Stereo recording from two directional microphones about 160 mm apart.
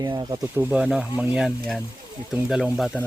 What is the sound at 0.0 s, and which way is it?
Speech, 25° right (ahead or behind).